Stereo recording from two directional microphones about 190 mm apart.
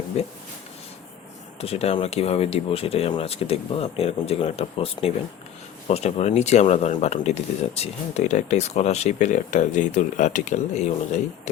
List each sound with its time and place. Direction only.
1.6 s speech: 30° left (ahead or behind)